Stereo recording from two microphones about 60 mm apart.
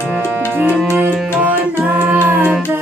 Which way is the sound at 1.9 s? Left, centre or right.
Right.